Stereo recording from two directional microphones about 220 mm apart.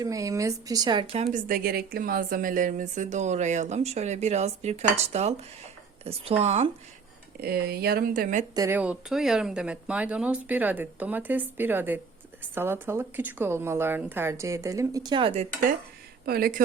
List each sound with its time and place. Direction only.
0.0 s a woman's voice: 15° right (ahead or behind)
7.4 s speech: 45° right (ahead or behind)
8.5 s speech: 10° right (ahead or behind)
16.2 s speech: 45° right (ahead or behind)